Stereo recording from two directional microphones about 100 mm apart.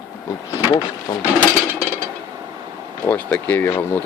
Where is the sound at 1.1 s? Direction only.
40° left (ahead or behind).